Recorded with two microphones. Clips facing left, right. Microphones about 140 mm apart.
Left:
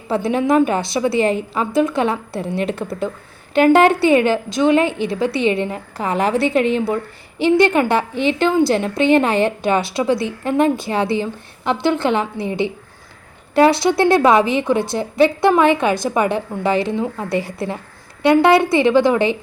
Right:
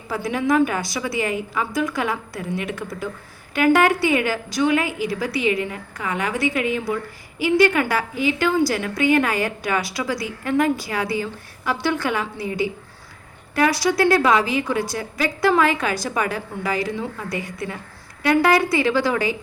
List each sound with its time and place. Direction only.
0.1 s a woman's voice: 25° left (ahead or behind)